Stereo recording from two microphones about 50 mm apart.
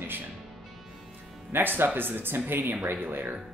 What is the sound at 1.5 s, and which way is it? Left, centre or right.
Speech, right.